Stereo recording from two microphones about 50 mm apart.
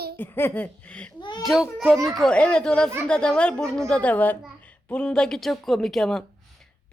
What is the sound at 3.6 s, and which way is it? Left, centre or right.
Speech, centre.